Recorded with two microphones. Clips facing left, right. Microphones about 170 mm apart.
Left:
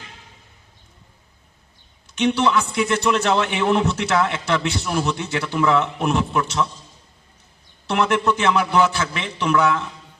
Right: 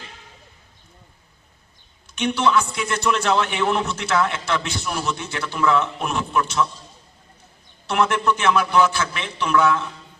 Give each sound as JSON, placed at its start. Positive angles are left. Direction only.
{"t": 2.1, "sound": "a man's voice", "side_deg": 20}
{"t": 7.9, "sound": "a man's voice", "side_deg": 20}